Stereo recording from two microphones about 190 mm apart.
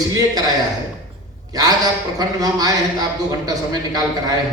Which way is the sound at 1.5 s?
20° right (ahead or behind).